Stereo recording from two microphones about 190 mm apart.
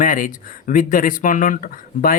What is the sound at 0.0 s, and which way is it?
Speech, 45° left (ahead or behind).